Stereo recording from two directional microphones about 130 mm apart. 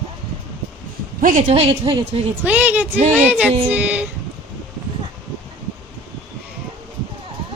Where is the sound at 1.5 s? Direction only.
45° right (ahead or behind).